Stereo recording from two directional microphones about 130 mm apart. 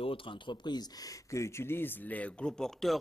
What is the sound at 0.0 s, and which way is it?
Speech, 45° left (ahead or behind).